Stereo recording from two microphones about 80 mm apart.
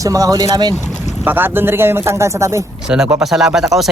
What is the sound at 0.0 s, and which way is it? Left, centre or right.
Speech, right.